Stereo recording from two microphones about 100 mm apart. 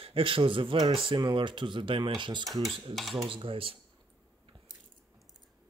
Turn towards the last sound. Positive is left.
turn(degrees=-65)  # may be behind; listen again after turning